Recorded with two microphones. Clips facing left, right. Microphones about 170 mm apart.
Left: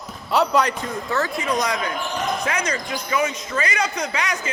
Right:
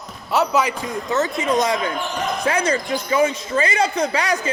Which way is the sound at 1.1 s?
20° right (ahead or behind).